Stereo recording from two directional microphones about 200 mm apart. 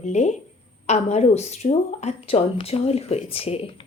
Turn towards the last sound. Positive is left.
turn(degrees=30)  # may be behind; listen again after turning